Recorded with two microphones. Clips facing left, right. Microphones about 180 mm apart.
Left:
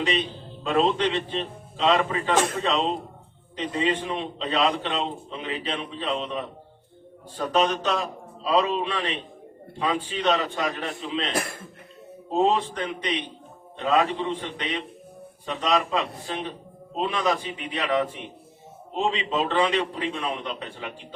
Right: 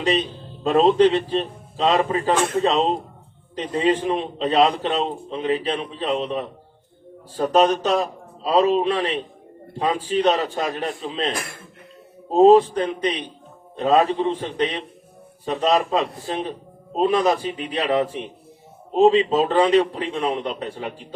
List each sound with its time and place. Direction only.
0.6 s a man's voice: 35° right (ahead or behind)
11.3 s speech: 40° left (ahead or behind)
12.3 s a man's voice: 40° right (ahead or behind)